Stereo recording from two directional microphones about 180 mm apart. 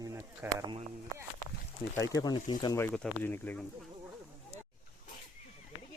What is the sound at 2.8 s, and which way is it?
Speech, 10° left (ahead or behind).